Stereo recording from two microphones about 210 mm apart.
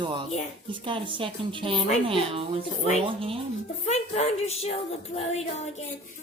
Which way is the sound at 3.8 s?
30° left (ahead or behind).